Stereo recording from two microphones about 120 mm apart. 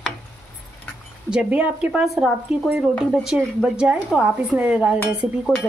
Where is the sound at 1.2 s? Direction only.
10° right (ahead or behind).